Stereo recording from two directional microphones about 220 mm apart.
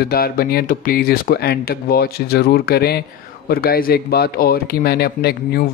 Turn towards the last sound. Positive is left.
turn(degrees=45)  # may be behind; listen again after turning